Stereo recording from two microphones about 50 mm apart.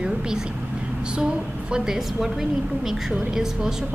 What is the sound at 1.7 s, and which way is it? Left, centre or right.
A woman's voice, centre.